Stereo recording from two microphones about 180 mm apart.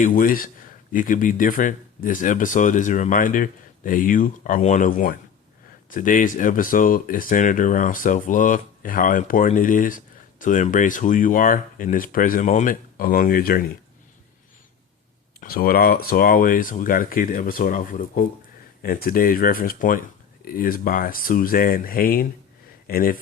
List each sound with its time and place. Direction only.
0.0 s speech: 50° left (ahead or behind)
15.4 s speech: 55° left (ahead or behind)